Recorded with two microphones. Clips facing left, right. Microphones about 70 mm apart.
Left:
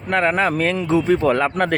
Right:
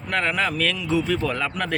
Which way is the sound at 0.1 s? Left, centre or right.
Left.